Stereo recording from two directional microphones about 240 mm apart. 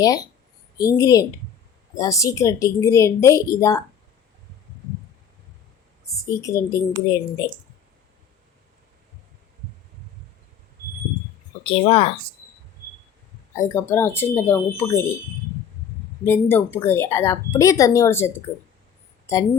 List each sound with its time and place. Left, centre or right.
0.0 s speech: centre
6.3 s speech: centre
11.6 s speech: left
13.6 s speech: centre
16.2 s speech: centre